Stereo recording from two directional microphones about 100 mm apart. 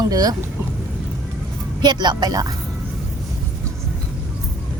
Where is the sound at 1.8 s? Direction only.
45° right (ahead or behind).